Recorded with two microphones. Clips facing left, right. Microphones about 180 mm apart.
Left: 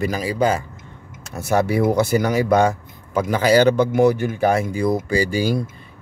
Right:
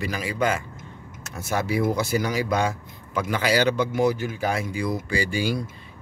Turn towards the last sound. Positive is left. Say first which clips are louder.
# left 5 dB
turn(degrees=40)  # may be behind; listen again after turning